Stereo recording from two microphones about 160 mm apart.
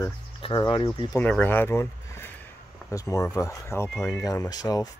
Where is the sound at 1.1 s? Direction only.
10° left (ahead or behind).